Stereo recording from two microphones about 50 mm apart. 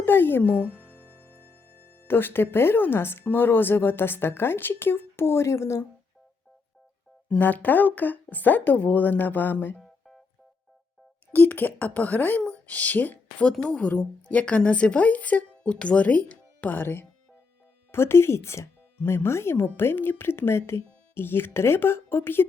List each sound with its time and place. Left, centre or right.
0.0 s music: left
0.5 s music: centre
1.9 s speech: left
7.3 s speech: left
11.3 s speech: left
13.4 s speech: centre
13.8 s speech: left
16.7 s speech: left